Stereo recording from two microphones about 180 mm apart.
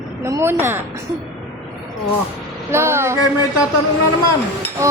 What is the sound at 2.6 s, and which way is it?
Music, 15° right (ahead or behind).